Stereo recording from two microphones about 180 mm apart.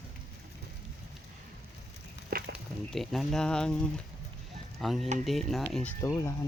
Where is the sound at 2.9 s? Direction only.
Centre (ahead or behind).